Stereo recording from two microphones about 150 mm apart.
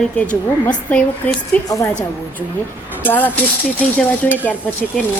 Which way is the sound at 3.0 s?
10° left (ahead or behind).